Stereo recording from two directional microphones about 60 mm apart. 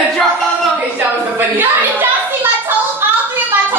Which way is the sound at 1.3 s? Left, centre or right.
Right.